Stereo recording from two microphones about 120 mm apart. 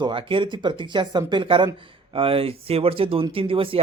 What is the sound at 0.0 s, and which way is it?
Speech, 45° right (ahead or behind).